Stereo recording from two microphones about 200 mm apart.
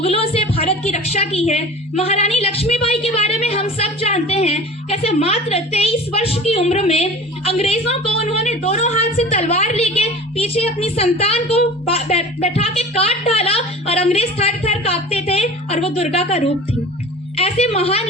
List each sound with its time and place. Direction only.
0.0 s a woman's voice: 30° left (ahead or behind)